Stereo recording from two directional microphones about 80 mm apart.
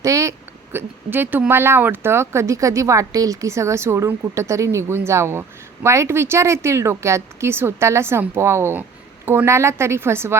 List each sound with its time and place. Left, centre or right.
0.0 s speech: right